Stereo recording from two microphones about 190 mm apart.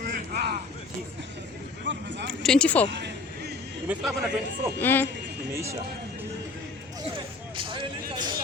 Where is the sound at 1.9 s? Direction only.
70° right (ahead or behind).